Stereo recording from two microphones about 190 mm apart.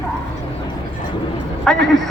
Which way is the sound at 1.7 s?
Centre (ahead or behind).